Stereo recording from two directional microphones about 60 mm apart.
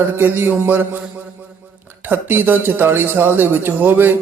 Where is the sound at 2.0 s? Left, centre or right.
Right.